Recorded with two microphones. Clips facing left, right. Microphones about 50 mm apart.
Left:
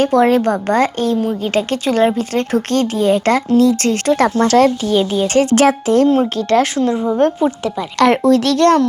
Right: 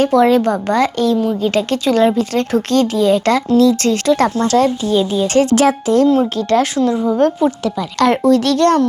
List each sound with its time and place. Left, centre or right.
0.0 s speech: left
7.4 s speech: left
7.9 s a child's voice: left